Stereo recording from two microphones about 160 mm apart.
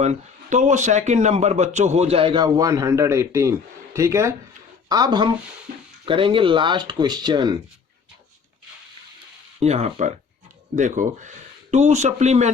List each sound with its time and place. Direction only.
0.0 s speech: 45° right (ahead or behind); by 7.6 s 30° right (ahead or behind)
9.6 s speech: 40° right (ahead or behind)